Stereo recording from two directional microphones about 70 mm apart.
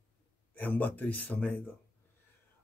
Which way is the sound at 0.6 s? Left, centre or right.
Left.